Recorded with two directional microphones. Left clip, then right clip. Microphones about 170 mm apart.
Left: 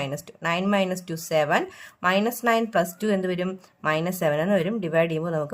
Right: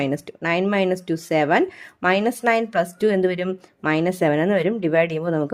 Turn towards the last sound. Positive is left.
turn(degrees=-35)  # may be behind; listen again after turning